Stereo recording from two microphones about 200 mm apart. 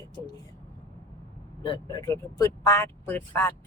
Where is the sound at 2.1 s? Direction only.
15° left (ahead or behind).